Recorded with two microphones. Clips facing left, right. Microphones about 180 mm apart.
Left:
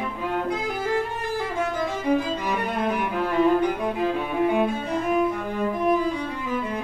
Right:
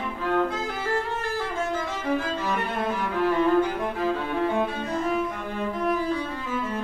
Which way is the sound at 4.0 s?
15° left (ahead or behind).